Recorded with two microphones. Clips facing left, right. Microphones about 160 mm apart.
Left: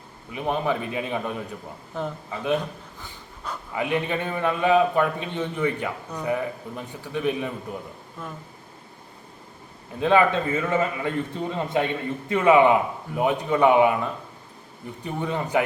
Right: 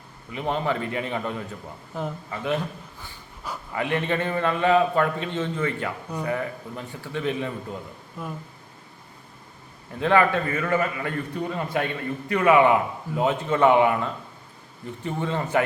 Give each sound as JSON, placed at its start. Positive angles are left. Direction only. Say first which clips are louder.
{"t": 0.3, "sound": "a man's voice", "louder": "left 1 dB", "side_deg": 15}
{"t": 2.0, "sound": "a man's voice", "louder": "left 1 dB", "side_deg": -5}
{"t": 3.8, "sound": "a man's voice", "louder": "even", "side_deg": 15}
{"t": 8.2, "sound": "speech", "louder": "right 3 dB", "side_deg": -10}
{"t": 10.0, "sound": "a man's voice", "louder": "left 1 dB", "side_deg": 20}